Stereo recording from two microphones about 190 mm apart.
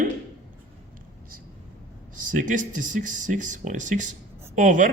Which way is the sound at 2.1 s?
45° right (ahead or behind).